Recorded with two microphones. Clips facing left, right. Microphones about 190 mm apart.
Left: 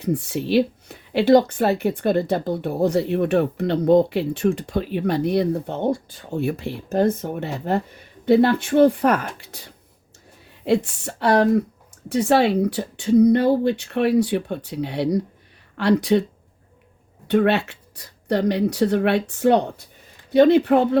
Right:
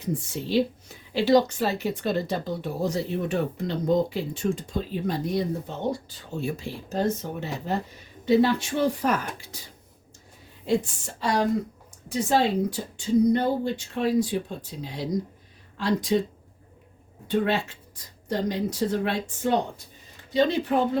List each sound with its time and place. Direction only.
0.0 s speech: 65° left (ahead or behind)
17.2 s speech: 70° left (ahead or behind)